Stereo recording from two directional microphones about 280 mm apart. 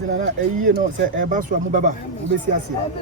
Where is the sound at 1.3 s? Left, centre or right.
Right.